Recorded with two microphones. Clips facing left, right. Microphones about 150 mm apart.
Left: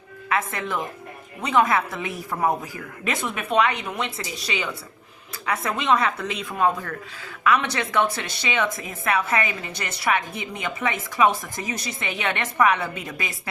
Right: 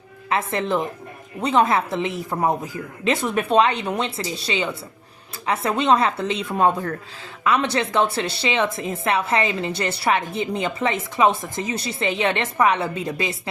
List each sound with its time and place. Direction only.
0.3 s a woman's voice: 30° right (ahead or behind)